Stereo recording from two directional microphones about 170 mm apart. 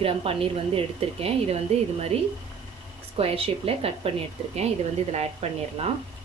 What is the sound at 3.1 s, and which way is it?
Speech, 35° right (ahead or behind).